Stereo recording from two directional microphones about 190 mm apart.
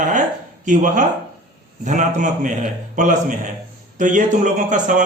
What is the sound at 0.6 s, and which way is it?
A man's voice, 40° right (ahead or behind).